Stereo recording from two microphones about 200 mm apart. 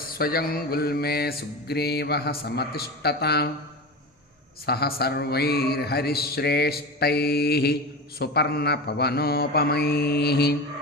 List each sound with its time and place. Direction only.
0.0 s music: 50° left (ahead or behind)
4.6 s music: 50° left (ahead or behind)